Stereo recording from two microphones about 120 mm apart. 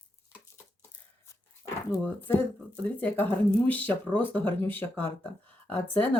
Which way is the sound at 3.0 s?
15° left (ahead or behind).